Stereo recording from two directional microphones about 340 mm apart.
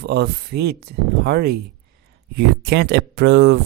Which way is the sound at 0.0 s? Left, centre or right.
Right.